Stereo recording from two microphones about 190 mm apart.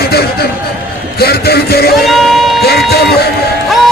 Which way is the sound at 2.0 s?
Centre (ahead or behind).